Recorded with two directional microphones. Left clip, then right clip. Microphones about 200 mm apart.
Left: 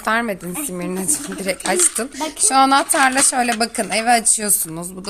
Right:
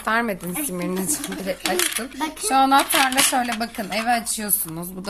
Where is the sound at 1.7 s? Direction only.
35° left (ahead or behind).